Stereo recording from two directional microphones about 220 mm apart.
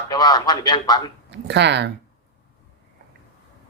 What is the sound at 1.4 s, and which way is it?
Speech, 50° right (ahead or behind).